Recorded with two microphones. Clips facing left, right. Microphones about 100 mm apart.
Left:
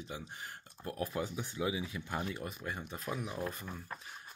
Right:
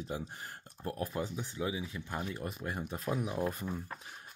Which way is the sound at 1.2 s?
10° left (ahead or behind).